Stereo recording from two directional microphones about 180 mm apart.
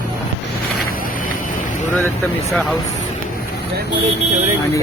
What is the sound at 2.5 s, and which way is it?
Speech, centre (ahead or behind).